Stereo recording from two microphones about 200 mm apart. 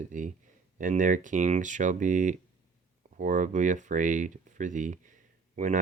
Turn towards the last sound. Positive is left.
turn(degrees=-35)  # may be behind; listen again after turning